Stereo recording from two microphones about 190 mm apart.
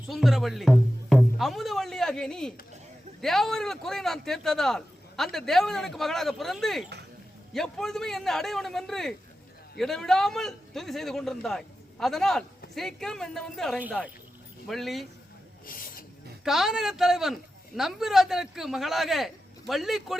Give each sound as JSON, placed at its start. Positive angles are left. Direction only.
{"t": 0.1, "sound": "a man's voice", "side_deg": 0}
{"t": 15.6, "sound": "a sound", "side_deg": 50}
{"t": 16.4, "sound": "a man's voice", "side_deg": 0}